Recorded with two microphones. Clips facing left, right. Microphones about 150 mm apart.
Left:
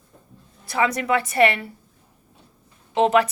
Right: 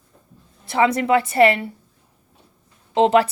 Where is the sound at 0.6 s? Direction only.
25° right (ahead or behind).